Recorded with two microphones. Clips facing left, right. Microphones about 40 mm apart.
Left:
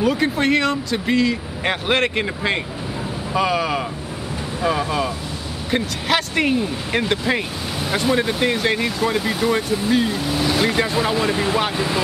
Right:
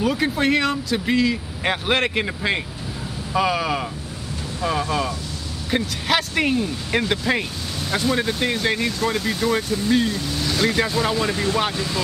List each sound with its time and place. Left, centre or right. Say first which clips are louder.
0.0 s speech: left 2 dB; centre; by 12.0 s left